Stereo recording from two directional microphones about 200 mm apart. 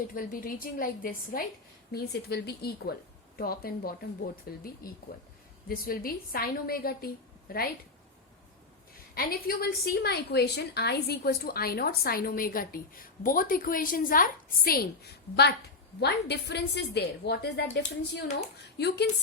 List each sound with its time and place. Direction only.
0.1 s a woman's voice: 45° left (ahead or behind)
9.1 s a woman's voice: 50° left (ahead or behind)